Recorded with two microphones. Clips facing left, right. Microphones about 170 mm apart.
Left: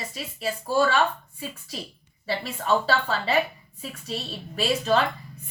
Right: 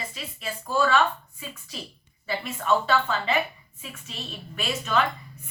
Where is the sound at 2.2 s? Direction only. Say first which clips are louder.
Even; 35° left (ahead or behind).